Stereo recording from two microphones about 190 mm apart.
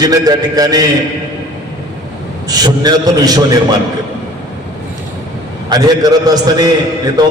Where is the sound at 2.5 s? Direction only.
20° right (ahead or behind).